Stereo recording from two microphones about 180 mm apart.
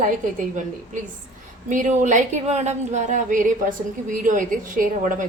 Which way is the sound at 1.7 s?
45° right (ahead or behind).